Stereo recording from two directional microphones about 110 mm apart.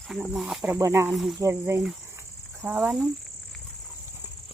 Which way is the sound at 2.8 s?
5° right (ahead or behind).